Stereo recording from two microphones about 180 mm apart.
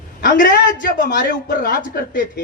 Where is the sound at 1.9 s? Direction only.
60° left (ahead or behind).